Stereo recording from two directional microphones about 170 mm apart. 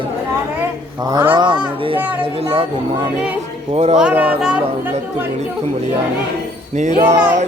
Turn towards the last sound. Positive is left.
turn(degrees=-45)  # may be behind; listen again after turning